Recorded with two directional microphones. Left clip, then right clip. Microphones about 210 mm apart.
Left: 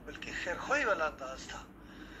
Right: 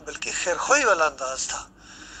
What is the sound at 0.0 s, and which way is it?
A man's voice, 50° right (ahead or behind).